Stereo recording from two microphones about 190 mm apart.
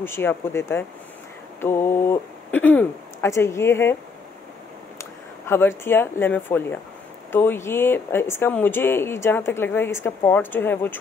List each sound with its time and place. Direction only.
0.0 s speech: 10° left (ahead or behind)
5.5 s speech: 10° left (ahead or behind)